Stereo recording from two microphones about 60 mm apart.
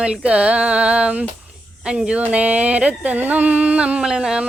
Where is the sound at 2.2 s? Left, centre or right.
Right.